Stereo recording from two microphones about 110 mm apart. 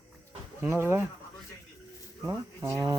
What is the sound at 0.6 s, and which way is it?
Speech, 20° right (ahead or behind).